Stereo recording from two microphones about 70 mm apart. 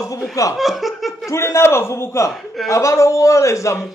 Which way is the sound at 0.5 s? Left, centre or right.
Centre.